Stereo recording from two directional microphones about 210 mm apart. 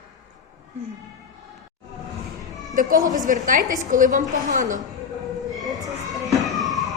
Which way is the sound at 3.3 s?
40° right (ahead or behind).